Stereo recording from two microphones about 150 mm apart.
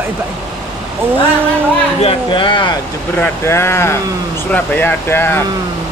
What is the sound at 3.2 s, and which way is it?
Speech, 15° left (ahead or behind).